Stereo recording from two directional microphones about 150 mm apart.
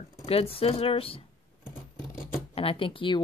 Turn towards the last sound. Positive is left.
turn(degrees=35)  # may be behind; listen again after turning